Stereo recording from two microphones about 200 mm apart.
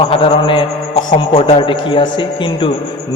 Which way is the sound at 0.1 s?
25° left (ahead or behind).